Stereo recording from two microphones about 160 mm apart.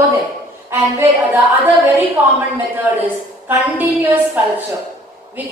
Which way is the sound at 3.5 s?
10° right (ahead or behind).